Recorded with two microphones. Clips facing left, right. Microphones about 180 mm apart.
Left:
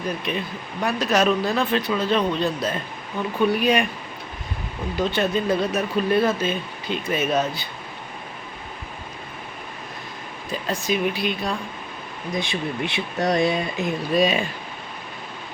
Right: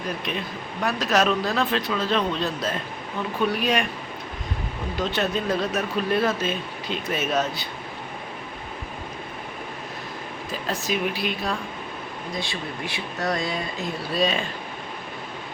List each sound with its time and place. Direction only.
0.3 s speech: centre (ahead or behind)
4.9 s speech: centre (ahead or behind)
10.5 s speech: centre (ahead or behind)
12.3 s speech: 20° left (ahead or behind)